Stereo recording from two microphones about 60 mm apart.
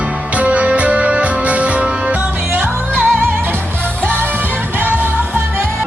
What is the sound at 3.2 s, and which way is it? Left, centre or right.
Music, right.